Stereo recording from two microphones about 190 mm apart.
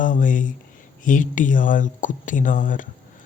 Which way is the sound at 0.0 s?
45° left (ahead or behind).